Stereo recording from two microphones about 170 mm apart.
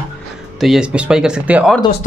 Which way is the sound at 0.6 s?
5° right (ahead or behind).